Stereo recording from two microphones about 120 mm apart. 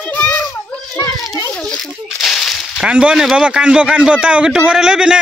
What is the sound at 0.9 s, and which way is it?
Children playing, 30° left (ahead or behind).